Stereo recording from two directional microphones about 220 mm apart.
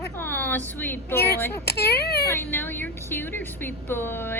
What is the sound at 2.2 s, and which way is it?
Speech, 10° left (ahead or behind).